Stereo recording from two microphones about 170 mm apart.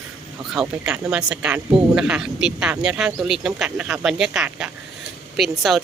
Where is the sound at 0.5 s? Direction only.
5° right (ahead or behind).